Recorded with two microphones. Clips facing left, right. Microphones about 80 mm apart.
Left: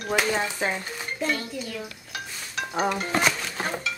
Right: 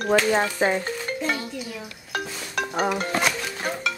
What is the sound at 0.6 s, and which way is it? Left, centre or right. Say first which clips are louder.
Stir: right 7 dB; centre.